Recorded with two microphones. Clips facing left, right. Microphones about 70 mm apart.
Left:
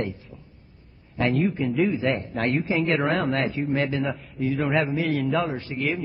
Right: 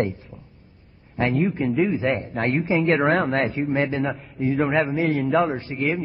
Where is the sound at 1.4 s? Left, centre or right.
Right.